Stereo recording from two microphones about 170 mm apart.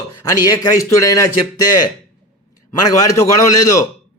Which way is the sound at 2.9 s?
20° left (ahead or behind).